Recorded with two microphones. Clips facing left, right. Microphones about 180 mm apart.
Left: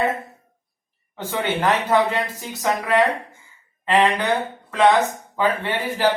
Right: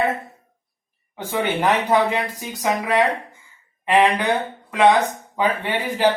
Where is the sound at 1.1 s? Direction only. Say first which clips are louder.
Right 1 dB; 15° right (ahead or behind).